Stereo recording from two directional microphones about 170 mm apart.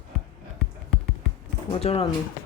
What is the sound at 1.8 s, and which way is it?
Speech, 35° left (ahead or behind).